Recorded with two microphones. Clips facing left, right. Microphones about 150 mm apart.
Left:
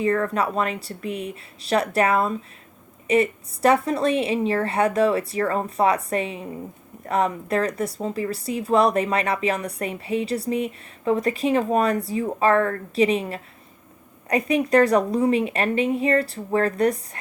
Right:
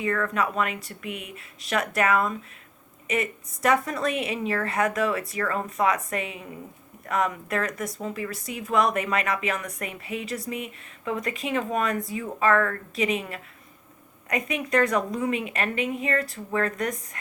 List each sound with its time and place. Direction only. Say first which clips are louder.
0.0 s speech: left 4 dB; 35° left (ahead or behind)